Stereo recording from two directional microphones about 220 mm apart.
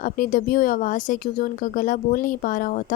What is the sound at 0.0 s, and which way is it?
A woman's voice, 40° left (ahead or behind).